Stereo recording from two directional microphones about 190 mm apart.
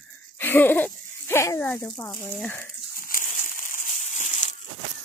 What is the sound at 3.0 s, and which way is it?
Crushing, 45° left (ahead or behind).